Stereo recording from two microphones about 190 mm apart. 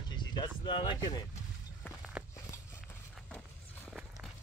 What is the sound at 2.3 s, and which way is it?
Walk, 15° left (ahead or behind).